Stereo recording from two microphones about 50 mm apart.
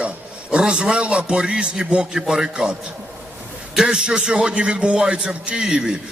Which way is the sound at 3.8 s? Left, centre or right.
Centre.